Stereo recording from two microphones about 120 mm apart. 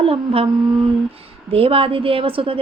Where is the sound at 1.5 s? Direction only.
55° right (ahead or behind).